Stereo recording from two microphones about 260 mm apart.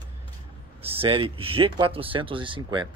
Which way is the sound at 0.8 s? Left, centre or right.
Right.